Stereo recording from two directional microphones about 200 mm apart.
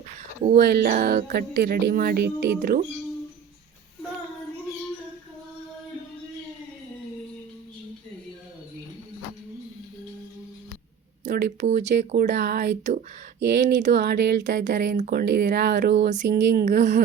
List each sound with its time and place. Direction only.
0.4 s speech: 50° right (ahead or behind)
11.3 s speech: 55° right (ahead or behind)
11.6 s speech: 35° right (ahead or behind)
11.9 s speech: 50° right (ahead or behind)
16.0 s speech: 35° right (ahead or behind)
16.2 s speech: 55° right (ahead or behind)
16.6 s speech: 40° right (ahead or behind)